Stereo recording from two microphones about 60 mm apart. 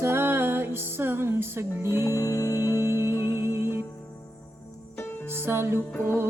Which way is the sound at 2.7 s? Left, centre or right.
Right.